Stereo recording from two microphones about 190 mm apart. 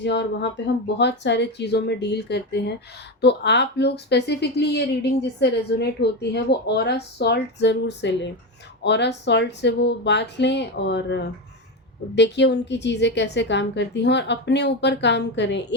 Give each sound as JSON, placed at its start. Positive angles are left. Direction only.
{"t": 0.0, "sound": "a woman's voice", "side_deg": 65}